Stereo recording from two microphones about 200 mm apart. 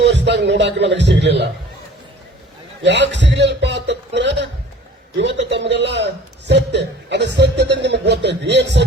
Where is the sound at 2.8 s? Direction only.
60° right (ahead or behind).